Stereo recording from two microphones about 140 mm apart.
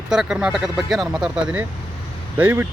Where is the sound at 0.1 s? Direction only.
5° right (ahead or behind).